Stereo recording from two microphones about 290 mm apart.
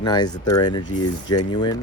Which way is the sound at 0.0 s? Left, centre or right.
Centre.